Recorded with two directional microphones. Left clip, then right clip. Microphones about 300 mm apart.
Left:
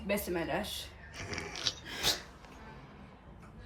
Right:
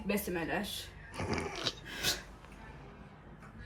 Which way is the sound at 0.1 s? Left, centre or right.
Centre.